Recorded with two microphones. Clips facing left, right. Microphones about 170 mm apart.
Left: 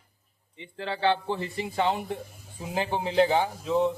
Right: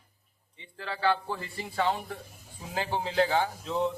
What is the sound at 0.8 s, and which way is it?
A man's voice, 25° left (ahead or behind).